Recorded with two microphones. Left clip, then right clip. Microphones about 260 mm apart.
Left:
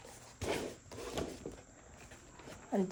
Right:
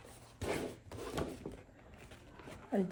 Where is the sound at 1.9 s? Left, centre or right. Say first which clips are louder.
Even; centre.